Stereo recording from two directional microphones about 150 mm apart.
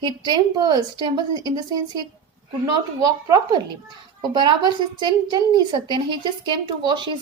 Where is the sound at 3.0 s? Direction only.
25° right (ahead or behind).